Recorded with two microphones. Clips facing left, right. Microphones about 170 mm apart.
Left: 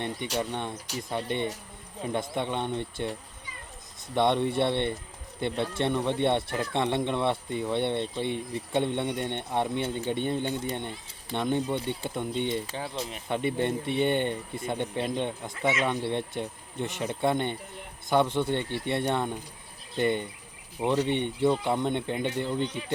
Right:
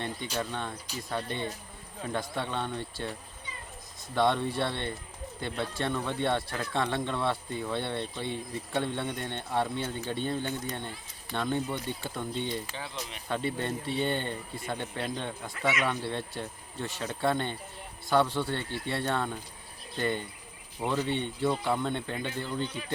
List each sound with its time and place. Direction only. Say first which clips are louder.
0.3 s speech: left 3 dB; 20° left (ahead or behind)
4.1 s speech: left 2 dB; 20° left (ahead or behind)
12.7 s speech: left 5 dB; 45° left (ahead or behind)
13.2 s speech: left 4 dB; 20° left (ahead or behind)